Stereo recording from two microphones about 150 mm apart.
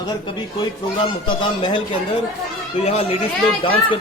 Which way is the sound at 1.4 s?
35° left (ahead or behind).